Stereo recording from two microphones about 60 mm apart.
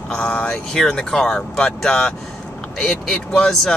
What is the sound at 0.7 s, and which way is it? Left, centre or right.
Speech, centre.